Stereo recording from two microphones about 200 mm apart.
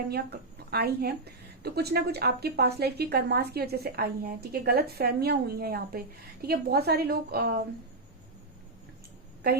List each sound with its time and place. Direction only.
0.1 s a woman's voice: 50° right (ahead or behind)